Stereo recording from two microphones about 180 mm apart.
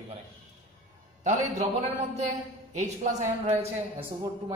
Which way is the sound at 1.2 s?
40° right (ahead or behind).